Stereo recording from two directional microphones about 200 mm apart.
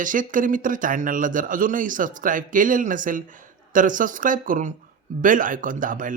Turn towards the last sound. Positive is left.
turn(degrees=-40)  # may be behind; listen again after turning